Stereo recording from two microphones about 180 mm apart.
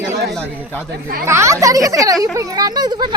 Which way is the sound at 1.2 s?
15° right (ahead or behind).